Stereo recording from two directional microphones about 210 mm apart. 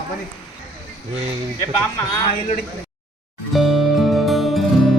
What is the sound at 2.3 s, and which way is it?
Speech, 40° left (ahead or behind).